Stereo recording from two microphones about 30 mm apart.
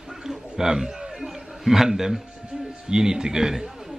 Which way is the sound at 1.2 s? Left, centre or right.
Centre.